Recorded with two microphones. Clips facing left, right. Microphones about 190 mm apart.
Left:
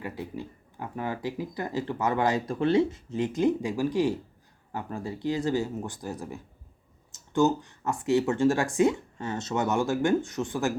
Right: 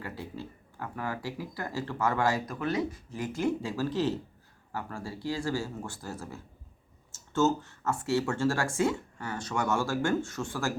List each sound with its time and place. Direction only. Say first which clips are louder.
0.0 s speech: left 4 dB; 15° left (ahead or behind)